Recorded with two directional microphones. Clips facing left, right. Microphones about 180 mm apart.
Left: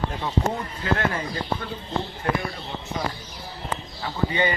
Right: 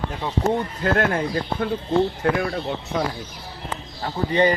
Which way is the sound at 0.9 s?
55° right (ahead or behind).